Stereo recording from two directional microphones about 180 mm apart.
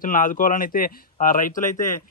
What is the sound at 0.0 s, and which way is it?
Speech, 50° left (ahead or behind).